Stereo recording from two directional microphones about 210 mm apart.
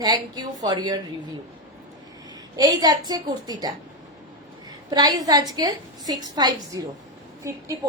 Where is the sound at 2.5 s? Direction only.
20° right (ahead or behind).